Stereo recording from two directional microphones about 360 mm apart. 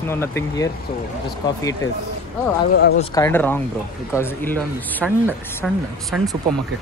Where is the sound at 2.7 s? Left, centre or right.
Left.